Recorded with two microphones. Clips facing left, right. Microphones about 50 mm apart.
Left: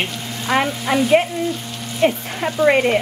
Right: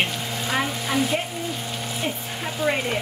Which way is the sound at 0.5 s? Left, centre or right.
Left.